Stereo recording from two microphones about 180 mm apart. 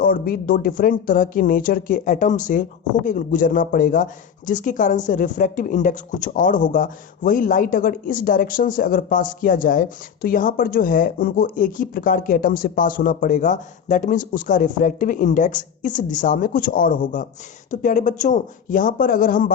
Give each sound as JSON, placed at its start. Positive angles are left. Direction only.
{"t": 0.0, "sound": "speech", "side_deg": 55}